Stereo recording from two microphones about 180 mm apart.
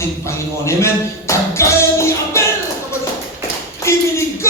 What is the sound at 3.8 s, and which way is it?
Speech, 15° left (ahead or behind).